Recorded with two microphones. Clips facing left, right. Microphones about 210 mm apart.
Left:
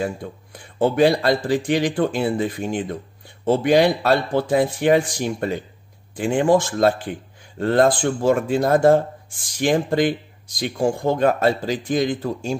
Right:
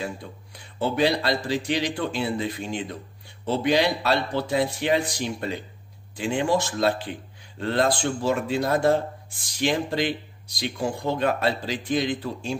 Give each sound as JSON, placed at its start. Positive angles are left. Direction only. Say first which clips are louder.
{"t": 0.0, "sound": "speech", "louder": "left 7 dB", "side_deg": 50}